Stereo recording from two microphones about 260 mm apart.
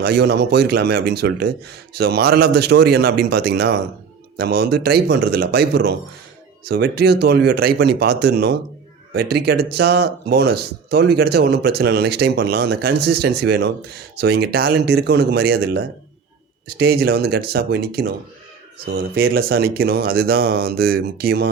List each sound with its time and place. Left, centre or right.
0.0 s speech: right